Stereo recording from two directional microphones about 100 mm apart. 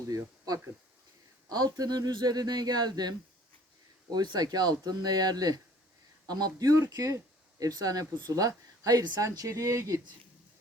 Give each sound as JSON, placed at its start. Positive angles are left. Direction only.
{"t": 0.1, "sound": "speech", "side_deg": -35}